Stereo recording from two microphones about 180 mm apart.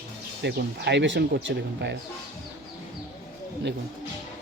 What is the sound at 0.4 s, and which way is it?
Speech, 70° right (ahead or behind).